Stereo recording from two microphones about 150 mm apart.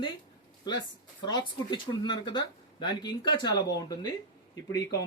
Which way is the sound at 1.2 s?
30° left (ahead or behind).